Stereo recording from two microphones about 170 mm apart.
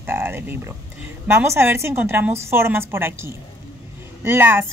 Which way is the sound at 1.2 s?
15° right (ahead or behind).